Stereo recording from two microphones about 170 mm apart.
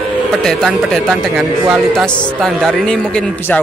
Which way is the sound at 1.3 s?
5° right (ahead or behind).